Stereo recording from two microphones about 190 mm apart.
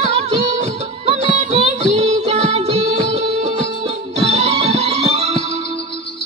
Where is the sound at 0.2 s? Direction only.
35° right (ahead or behind).